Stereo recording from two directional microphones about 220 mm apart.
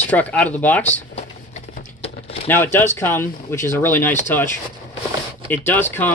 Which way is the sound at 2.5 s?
10° left (ahead or behind).